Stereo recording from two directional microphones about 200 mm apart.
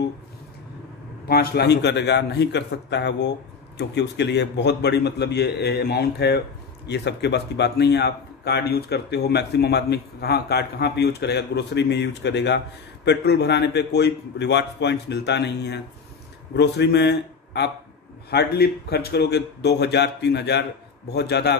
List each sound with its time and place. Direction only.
1.3 s speech: 50° left (ahead or behind)